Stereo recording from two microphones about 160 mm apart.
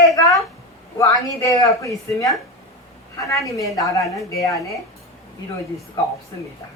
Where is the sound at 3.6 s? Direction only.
20° left (ahead or behind).